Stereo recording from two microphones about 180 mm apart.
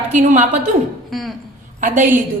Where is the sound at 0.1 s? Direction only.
45° right (ahead or behind).